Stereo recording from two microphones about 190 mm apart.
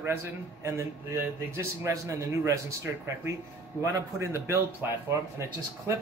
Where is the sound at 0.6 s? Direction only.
15° right (ahead or behind).